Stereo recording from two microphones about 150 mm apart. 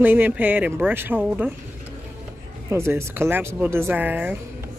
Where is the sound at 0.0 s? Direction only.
10° right (ahead or behind).